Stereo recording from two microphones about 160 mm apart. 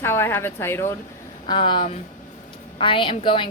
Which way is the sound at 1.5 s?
30° left (ahead or behind).